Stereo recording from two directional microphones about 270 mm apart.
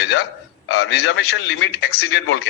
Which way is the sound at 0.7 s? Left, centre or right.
Left.